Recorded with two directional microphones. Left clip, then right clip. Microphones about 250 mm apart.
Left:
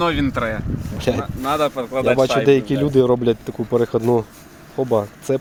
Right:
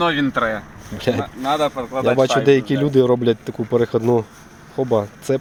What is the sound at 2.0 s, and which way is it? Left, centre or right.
Speech, centre.